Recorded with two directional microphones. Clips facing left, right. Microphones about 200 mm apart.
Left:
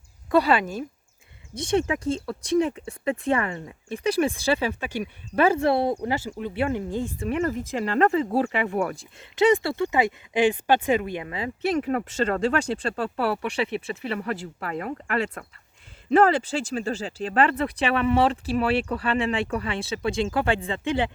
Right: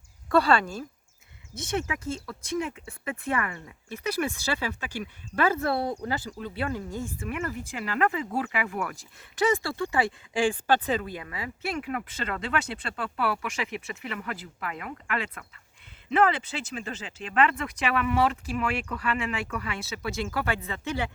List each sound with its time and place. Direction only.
0.3 s speech: 20° left (ahead or behind)
1.9 s speech: 30° left (ahead or behind)